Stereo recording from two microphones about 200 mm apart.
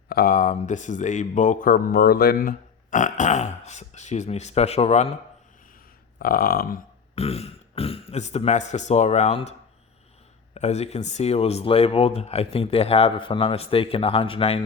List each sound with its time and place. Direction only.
0.1 s speech: 45° left (ahead or behind); by 5.1 s 30° left (ahead or behind)
6.1 s a sound: 50° left (ahead or behind)
7.2 s speech: 30° left (ahead or behind)